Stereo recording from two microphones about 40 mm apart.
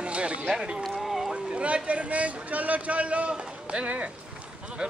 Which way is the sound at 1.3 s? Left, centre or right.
Right.